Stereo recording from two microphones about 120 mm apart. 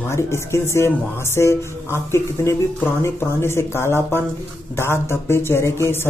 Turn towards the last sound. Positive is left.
turn(degrees=20)  # may be behind; listen again after turning